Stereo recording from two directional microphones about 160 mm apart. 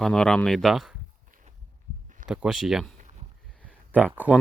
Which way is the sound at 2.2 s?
5° right (ahead or behind).